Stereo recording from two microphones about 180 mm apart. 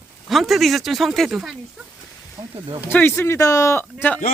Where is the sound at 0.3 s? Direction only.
Centre (ahead or behind).